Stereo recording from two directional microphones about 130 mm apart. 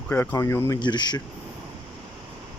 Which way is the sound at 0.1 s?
10° left (ahead or behind).